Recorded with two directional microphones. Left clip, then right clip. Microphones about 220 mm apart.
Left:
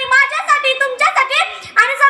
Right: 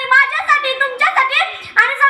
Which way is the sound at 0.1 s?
45° left (ahead or behind).